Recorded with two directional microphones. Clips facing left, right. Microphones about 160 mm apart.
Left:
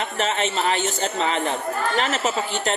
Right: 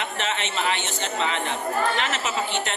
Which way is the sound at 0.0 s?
40° left (ahead or behind).